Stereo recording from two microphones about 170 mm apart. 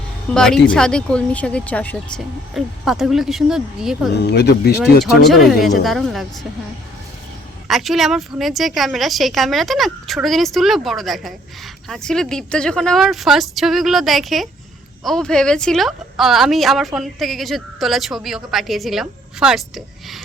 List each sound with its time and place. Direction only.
0.3 s a woman's voice: 5° left (ahead or behind)
4.2 s speech: 80° left
5.0 s a woman's voice: centre (ahead or behind)
7.7 s a woman's voice: centre (ahead or behind)